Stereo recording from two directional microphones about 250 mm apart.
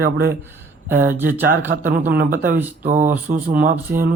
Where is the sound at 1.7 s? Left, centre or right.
Right.